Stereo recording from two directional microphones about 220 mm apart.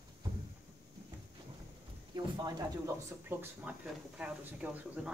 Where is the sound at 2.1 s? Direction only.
20° right (ahead or behind).